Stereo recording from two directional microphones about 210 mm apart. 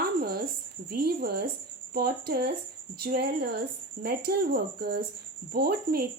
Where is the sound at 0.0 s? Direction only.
45° right (ahead or behind).